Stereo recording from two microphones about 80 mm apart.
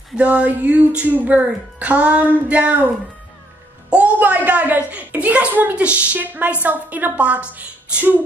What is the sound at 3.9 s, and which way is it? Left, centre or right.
A woman's voice, centre.